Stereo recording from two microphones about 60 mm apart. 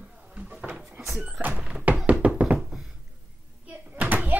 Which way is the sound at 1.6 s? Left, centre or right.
Centre.